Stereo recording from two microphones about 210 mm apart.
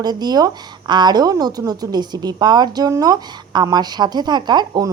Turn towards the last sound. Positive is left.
turn(degrees=-20)  # may be behind; listen again after turning